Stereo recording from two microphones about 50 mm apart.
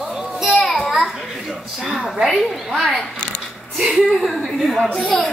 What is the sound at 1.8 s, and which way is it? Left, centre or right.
A woman's voice, centre.